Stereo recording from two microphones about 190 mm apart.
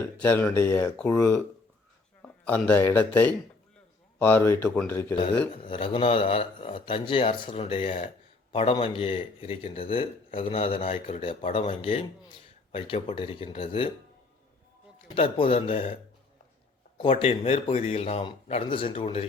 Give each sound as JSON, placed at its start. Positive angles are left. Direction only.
{"t": 0.2, "sound": "speech", "side_deg": 10}
{"t": 2.4, "sound": "speech", "side_deg": 10}
{"t": 5.6, "sound": "speech", "side_deg": 30}
{"t": 15.0, "sound": "speech", "side_deg": 30}
{"t": 17.0, "sound": "speech", "side_deg": 30}